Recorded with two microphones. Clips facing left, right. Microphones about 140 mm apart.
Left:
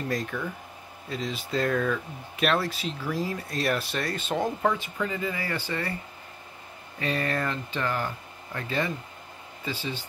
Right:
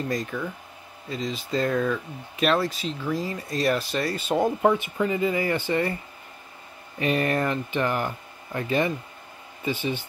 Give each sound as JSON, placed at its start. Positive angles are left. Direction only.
{"t": 0.1, "sound": "speech", "side_deg": 0}
{"t": 4.6, "sound": "speech", "side_deg": -20}
{"t": 7.0, "sound": "speech", "side_deg": -15}